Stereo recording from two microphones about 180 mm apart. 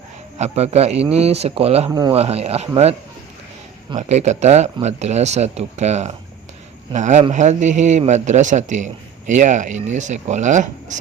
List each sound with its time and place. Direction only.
0.3 s a man's voice: 35° right (ahead or behind)
1.9 s speech: 20° right (ahead or behind)
2.1 s a man's voice: 35° right (ahead or behind)
3.9 s a man's voice: 40° right (ahead or behind)